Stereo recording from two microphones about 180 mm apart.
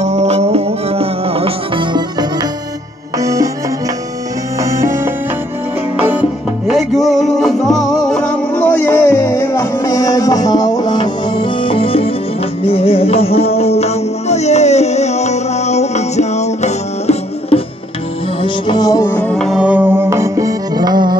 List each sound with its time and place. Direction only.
0.0 s music: 40° right (ahead or behind); by 3.4 s 20° right (ahead or behind)
4.6 s music: 15° right (ahead or behind)
6.7 s music: centre (ahead or behind); by 17.6 s 35° left (ahead or behind)
18.4 s music: 25° left (ahead or behind); by 21.2 s 25° right (ahead or behind)